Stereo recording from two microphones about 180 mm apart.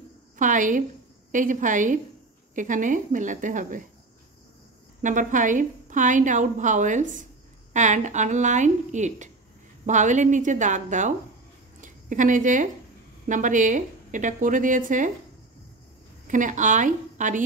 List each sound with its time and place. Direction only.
0.4 s a woman's voice: 45° right (ahead or behind)
5.0 s a woman's voice: 45° right (ahead or behind)
16.3 s a woman's voice: 45° right (ahead or behind)